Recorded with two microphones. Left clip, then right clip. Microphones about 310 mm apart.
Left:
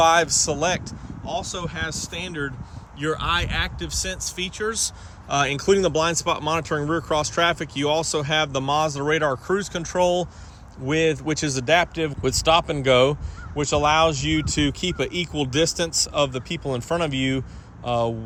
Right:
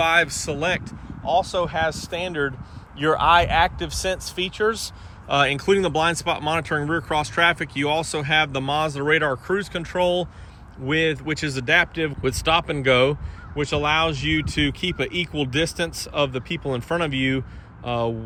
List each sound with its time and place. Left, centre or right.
0.0 s speech: centre